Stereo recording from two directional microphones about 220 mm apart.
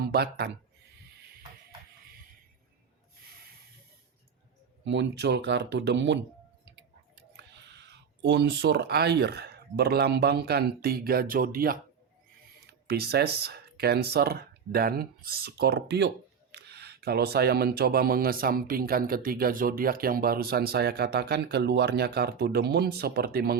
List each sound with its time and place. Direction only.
0.1 s speech: 45° right (ahead or behind)
4.9 s speech: 50° right (ahead or behind)
7.2 s speech: 50° right (ahead or behind)